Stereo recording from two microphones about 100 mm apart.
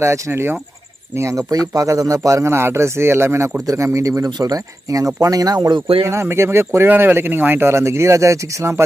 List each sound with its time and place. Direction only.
0.0 s a man's voice: 25° right (ahead or behind); by 5.8 s 45° right (ahead or behind)
6.1 s a man's voice: 25° right (ahead or behind)